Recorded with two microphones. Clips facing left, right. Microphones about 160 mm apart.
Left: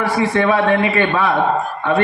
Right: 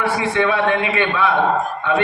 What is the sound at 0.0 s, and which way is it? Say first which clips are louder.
A man's voice: left 2 dB; 40° left (ahead or behind).